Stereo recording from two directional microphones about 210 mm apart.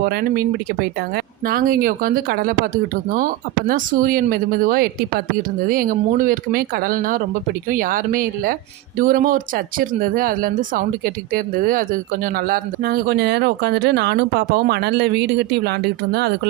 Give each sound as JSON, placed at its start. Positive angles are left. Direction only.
{"t": 0.0, "sound": "speech", "side_deg": -50}